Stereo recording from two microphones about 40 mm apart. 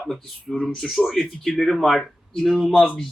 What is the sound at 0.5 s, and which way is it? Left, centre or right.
Speech, left.